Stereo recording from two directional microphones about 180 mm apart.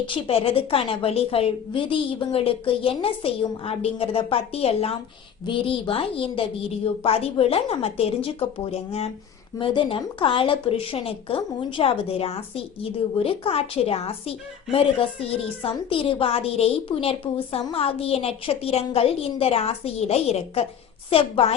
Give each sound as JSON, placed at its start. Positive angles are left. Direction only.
{"t": 0.1, "sound": "a woman's voice", "side_deg": 30}